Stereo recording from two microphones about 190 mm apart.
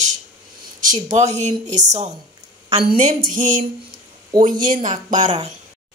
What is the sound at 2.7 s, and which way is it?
Speech, 30° right (ahead or behind).